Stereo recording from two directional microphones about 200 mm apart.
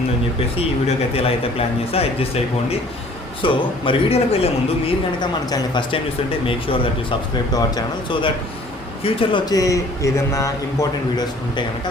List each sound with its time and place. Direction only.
0.5 s speech: 30° left (ahead or behind)
5.5 s a man's voice: 20° left (ahead or behind)